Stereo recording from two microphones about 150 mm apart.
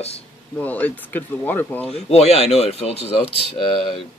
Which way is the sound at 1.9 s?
40° left (ahead or behind).